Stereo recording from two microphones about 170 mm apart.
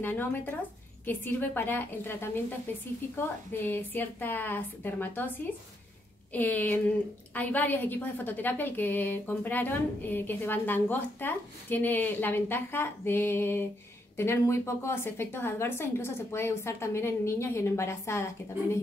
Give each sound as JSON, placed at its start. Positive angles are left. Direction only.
{"t": 0.0, "sound": "a woman's voice", "side_deg": 10}